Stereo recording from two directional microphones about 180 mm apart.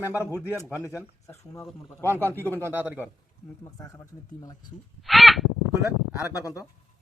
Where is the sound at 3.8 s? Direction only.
20° left (ahead or behind).